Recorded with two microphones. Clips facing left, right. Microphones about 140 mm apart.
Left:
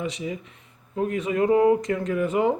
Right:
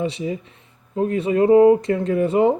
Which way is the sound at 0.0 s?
30° right (ahead or behind).